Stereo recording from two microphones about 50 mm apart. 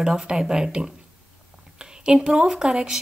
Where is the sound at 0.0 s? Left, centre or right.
Centre.